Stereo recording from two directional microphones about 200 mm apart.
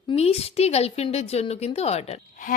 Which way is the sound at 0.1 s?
30° left (ahead or behind).